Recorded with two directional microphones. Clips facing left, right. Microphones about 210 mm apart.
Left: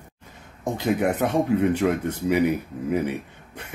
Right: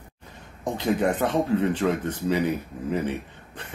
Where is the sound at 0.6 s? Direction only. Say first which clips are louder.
Left 1 dB; 10° left (ahead or behind).